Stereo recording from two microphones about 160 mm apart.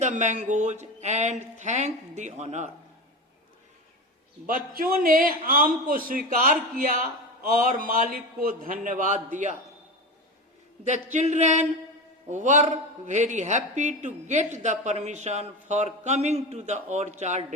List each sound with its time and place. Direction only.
0.0 s a man's voice: 50° right (ahead or behind)
4.4 s a man's voice: 60° right (ahead or behind)
10.8 s a man's voice: 45° right (ahead or behind)